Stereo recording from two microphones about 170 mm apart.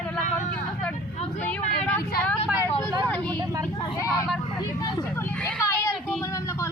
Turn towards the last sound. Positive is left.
turn(degrees=15)  # may be behind; listen again after turning